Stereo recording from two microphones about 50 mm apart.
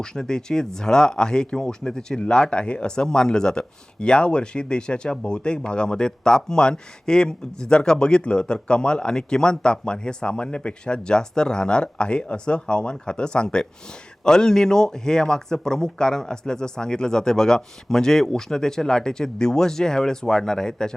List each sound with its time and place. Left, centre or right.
0.0 s speech: centre